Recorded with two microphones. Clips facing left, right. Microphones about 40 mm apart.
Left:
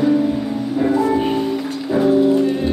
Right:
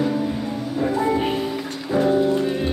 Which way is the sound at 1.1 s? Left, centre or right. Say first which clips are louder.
Left 4 dB; centre.